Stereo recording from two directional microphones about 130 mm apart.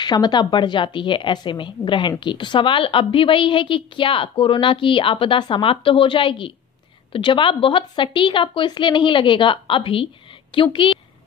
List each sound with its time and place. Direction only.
0.0 s speech: 35° left (ahead or behind)